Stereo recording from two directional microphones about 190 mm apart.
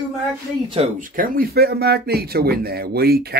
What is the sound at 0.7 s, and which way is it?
Speech, 40° right (ahead or behind).